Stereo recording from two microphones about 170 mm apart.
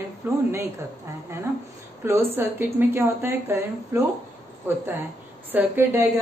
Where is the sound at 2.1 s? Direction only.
15° right (ahead or behind).